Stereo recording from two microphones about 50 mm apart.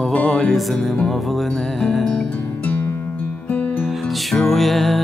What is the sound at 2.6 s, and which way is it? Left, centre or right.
Music, left.